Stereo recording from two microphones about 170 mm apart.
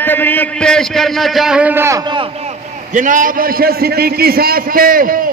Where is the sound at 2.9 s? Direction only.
50° right (ahead or behind).